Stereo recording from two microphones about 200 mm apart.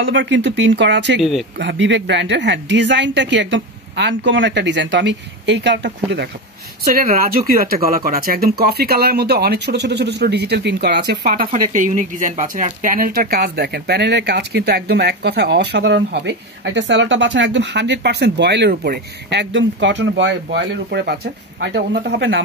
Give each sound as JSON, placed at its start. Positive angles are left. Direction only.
{"t": 0.0, "sound": "speech", "side_deg": -65}
{"t": 6.8, "sound": "speech", "side_deg": -45}